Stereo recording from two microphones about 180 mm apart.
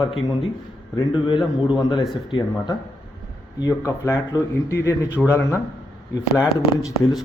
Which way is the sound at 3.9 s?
20° left (ahead or behind).